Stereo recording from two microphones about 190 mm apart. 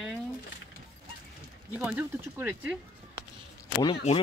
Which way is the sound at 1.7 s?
10° right (ahead or behind).